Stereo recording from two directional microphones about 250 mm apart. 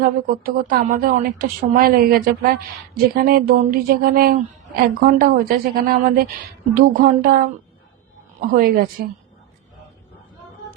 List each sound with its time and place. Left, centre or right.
0.0 s speech: right